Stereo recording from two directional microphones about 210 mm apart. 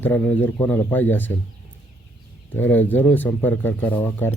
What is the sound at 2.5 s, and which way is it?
Speech, 10° left (ahead or behind).